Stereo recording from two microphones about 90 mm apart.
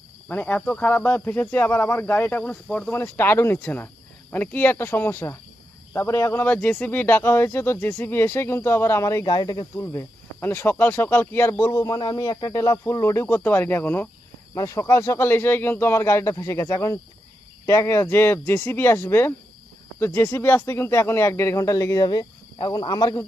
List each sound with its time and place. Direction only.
0.3 s speech: 20° left (ahead or behind)
9.2 s speech: 50° left (ahead or behind)
9.7 s speech: 35° left (ahead or behind)
10.4 s speech: 25° left (ahead or behind)
14.5 s speech: 35° left (ahead or behind)